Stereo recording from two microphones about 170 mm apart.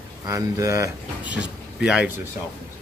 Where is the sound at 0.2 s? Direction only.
20° right (ahead or behind).